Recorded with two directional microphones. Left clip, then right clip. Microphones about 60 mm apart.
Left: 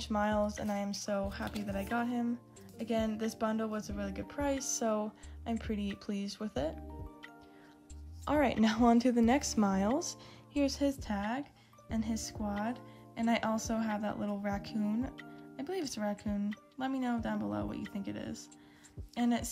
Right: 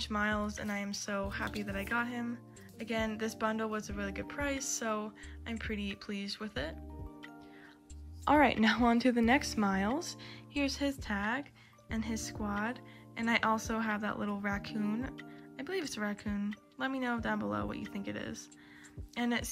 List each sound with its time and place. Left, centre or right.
0.0 s speech: left
8.3 s a woman's voice: centre
8.6 s speech: left
9.1 s speech: centre
9.4 s speech: left
9.9 s speech: left